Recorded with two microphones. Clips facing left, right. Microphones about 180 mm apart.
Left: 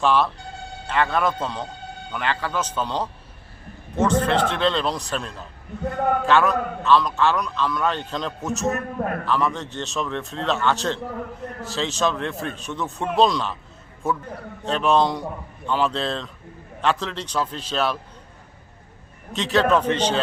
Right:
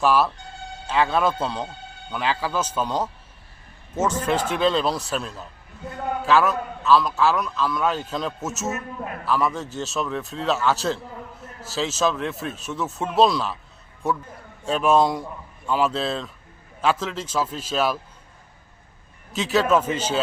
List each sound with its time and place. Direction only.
0.0 s a man's voice: 5° right (ahead or behind)
4.2 s a man's voice: 10° right (ahead or behind)
8.7 s a man's voice: 55° left (ahead or behind)
9.2 s speech: 5° right (ahead or behind)
11.0 s a man's voice: 65° left (ahead or behind)
11.6 s a man's voice: 5° right (ahead or behind)
19.3 s speech: 5° right (ahead or behind)